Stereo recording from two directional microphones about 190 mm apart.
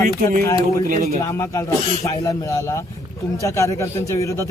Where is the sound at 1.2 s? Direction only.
15° left (ahead or behind).